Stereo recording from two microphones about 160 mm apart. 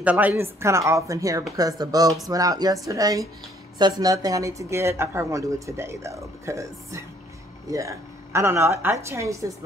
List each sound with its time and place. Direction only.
0.0 s a woman's voice: 10° right (ahead or behind)